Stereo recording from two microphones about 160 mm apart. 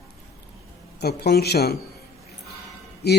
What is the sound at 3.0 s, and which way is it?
Speech, 90° left.